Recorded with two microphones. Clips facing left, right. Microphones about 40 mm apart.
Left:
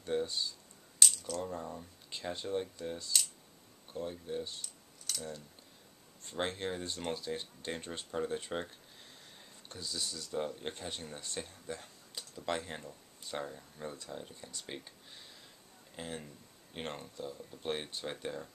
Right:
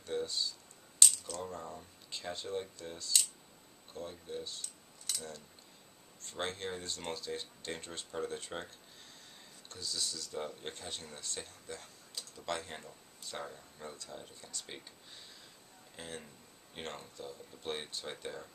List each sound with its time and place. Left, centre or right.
0.0 s speech: centre
1.0 s coin: centre
1.6 s speech: centre
4.6 s a sound: centre
6.2 s speech: centre
16.0 s speech: centre